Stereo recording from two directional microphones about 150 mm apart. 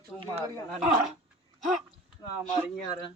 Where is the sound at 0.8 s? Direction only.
Centre (ahead or behind).